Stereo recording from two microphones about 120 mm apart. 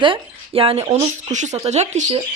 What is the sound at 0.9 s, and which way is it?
Speech, 75° right (ahead or behind).